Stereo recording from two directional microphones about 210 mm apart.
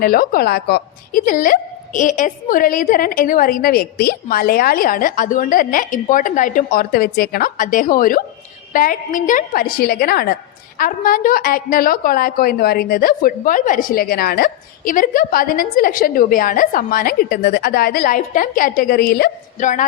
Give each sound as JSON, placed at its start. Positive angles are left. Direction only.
{"t": 0.0, "sound": "a woman's voice", "side_deg": 45}